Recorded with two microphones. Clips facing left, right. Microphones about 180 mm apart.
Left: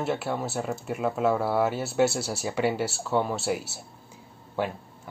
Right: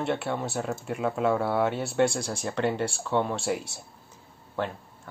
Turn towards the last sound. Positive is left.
turn(degrees=10)  # may be behind; listen again after turning